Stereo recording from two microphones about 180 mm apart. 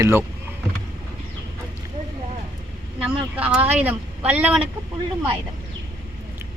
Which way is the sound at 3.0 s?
10° right (ahead or behind).